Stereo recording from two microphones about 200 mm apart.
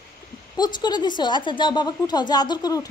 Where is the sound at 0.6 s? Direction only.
20° left (ahead or behind).